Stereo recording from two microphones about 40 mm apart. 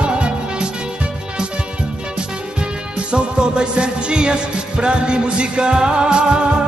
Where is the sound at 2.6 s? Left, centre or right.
Right.